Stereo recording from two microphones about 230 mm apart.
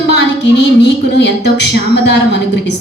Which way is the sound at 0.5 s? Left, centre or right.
Left.